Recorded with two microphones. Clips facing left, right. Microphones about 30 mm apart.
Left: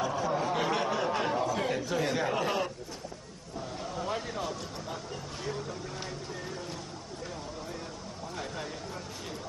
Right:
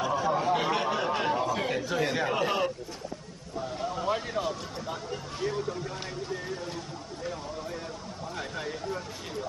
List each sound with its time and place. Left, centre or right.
0.0 s a sound: centre
3.8 s speech: centre
8.4 s speech: centre